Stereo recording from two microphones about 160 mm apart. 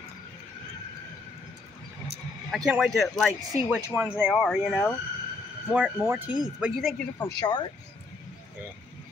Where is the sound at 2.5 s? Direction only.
Centre (ahead or behind).